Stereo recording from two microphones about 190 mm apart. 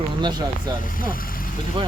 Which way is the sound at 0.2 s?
20° right (ahead or behind).